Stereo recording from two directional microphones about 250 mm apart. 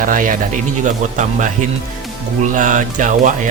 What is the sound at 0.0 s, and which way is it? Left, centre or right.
Speech, right.